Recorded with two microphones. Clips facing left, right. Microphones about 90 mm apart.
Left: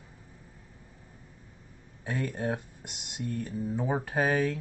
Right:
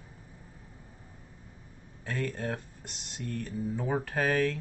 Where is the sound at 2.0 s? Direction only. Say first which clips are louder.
Left 2 dB; 15° left (ahead or behind).